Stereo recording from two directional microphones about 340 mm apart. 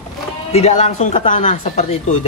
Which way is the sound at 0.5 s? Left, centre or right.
Centre.